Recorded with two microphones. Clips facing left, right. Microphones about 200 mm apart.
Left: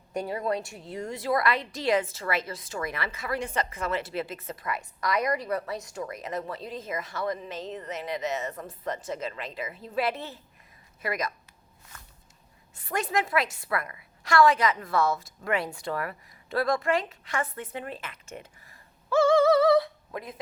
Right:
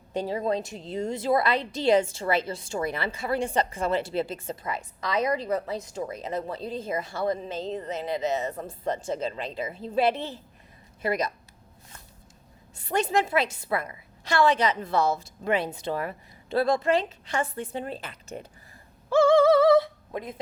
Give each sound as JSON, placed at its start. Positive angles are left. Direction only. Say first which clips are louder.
{"t": 0.1, "sound": "a woman's voice", "louder": "right 2 dB", "side_deg": -25}
{"t": 12.9, "sound": "a woman's voice", "louder": "right 3 dB", "side_deg": -25}
{"t": 19.1, "sound": "a sound", "louder": "right 2 dB", "side_deg": -25}